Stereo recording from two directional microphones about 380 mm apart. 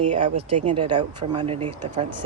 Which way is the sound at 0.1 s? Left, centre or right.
Centre.